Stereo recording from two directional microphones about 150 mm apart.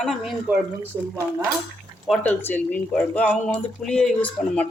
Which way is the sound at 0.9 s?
20° right (ahead or behind).